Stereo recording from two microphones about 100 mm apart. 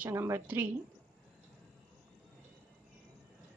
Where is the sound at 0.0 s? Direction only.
25° right (ahead or behind).